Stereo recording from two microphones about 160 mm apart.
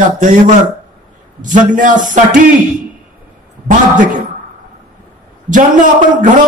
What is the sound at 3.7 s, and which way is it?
Speech, 55° right (ahead or behind).